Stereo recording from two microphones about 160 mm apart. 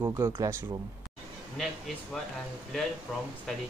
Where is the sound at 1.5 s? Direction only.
Centre (ahead or behind).